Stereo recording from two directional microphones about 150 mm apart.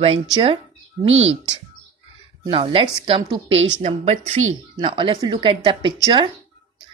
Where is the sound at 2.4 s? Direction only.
40° right (ahead or behind).